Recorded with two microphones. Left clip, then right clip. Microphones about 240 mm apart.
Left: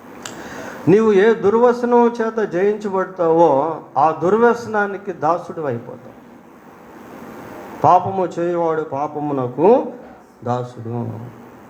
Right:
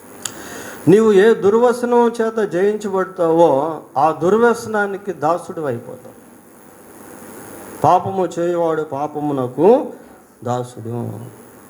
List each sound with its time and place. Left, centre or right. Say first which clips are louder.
0.6 s a man's voice: right 2 dB; right
7.8 s a man's voice: left 1 dB; right